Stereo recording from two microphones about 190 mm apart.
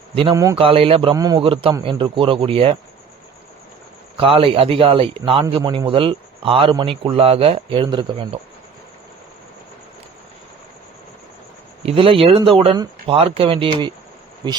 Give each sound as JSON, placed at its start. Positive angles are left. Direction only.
{"t": 0.1, "sound": "a man's voice", "side_deg": -30}
{"t": 4.2, "sound": "a man's voice", "side_deg": -30}
{"t": 11.9, "sound": "a man's voice", "side_deg": -30}